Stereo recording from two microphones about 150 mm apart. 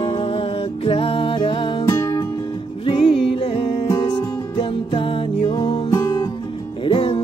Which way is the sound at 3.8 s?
30° left (ahead or behind).